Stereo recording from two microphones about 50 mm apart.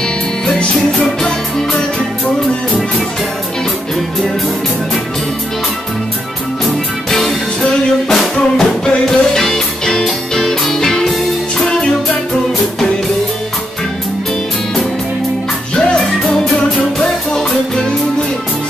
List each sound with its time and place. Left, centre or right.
6.6 s music: centre
11.5 s music: centre
15.7 s music: centre